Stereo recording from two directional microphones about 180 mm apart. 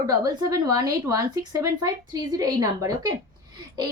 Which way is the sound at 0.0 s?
20° right (ahead or behind).